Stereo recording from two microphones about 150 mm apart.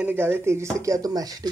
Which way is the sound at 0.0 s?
15° right (ahead or behind).